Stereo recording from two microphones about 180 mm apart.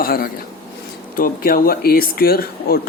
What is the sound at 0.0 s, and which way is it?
Speech, 55° left (ahead or behind).